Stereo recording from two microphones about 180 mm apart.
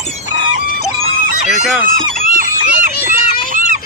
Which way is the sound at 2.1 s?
50° right (ahead or behind).